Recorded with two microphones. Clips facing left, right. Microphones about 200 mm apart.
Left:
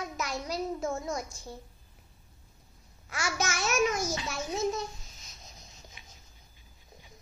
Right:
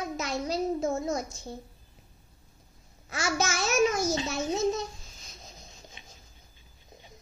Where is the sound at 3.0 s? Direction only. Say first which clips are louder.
Right 3 dB; 25° right (ahead or behind).